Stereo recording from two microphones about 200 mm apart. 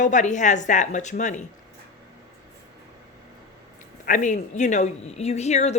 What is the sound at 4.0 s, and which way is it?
Speech, 40° left (ahead or behind).